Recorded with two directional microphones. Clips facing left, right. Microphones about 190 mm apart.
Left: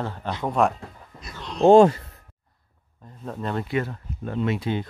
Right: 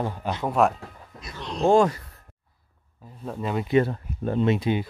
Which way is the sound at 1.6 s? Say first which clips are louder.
Left 5 dB; 25° left (ahead or behind).